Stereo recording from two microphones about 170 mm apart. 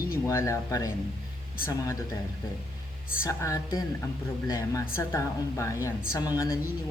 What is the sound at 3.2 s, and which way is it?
A woman's voice, 20° left (ahead or behind).